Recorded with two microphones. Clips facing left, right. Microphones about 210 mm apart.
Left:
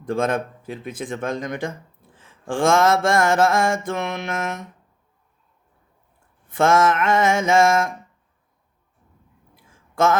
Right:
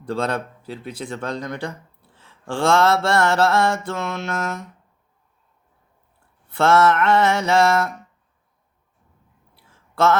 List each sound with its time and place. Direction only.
0.1 s mantra: 15° left (ahead or behind)
6.5 s mantra: 15° left (ahead or behind)
9.9 s speech: 15° left (ahead or behind)